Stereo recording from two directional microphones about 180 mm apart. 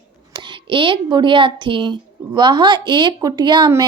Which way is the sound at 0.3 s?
25° right (ahead or behind).